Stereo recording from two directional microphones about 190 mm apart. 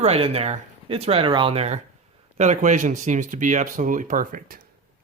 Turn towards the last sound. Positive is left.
turn(degrees=-45)  # may be behind; listen again after turning